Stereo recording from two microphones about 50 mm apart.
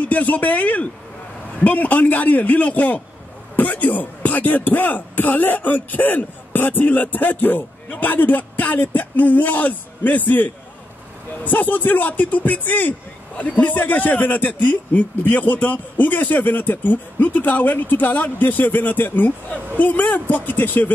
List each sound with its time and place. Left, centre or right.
0.0 s speech: left